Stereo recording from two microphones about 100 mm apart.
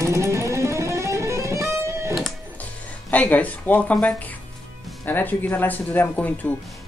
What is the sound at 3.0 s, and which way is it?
Speech, 15° left (ahead or behind).